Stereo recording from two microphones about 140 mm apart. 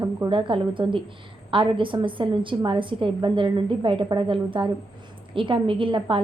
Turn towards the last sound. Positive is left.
turn(degrees=-35)  # may be behind; listen again after turning